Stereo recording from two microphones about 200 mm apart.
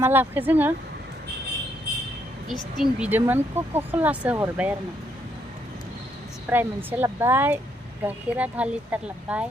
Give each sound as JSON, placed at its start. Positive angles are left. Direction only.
{"t": 0.0, "sound": "speech", "side_deg": -10}
{"t": 2.5, "sound": "speech", "side_deg": -5}
{"t": 6.5, "sound": "speech", "side_deg": -10}